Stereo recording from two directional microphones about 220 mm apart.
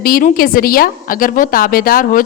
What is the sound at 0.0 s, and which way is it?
A woman's voice, 40° left (ahead or behind).